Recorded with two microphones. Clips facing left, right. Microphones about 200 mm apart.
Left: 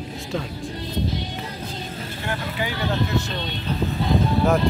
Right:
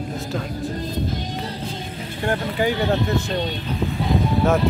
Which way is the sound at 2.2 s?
45° right (ahead or behind).